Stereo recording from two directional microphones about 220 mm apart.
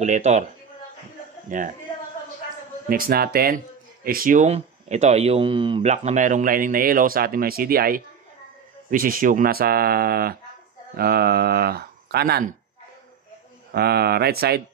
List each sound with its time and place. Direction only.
0.0 s speech: 30° right (ahead or behind)
1.5 s speech: 35° right (ahead or behind)
2.9 s speech: 45° right (ahead or behind)
13.7 s speech: 45° right (ahead or behind)